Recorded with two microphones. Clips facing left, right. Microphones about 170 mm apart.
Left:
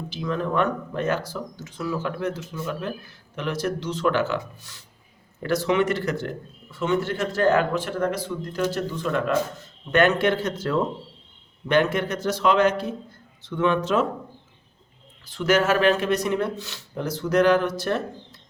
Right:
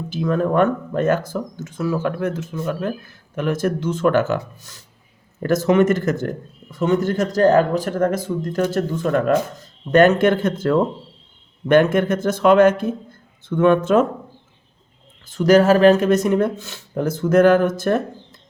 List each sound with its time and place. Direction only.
0.1 s a man's voice: 50° right (ahead or behind)
15.3 s a man's voice: 40° right (ahead or behind)